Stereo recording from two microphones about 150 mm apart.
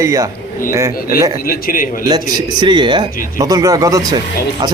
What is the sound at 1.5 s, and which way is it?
Speech, 75° left (ahead or behind).